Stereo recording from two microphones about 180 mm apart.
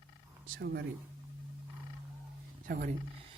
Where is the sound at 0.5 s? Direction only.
70° right (ahead or behind).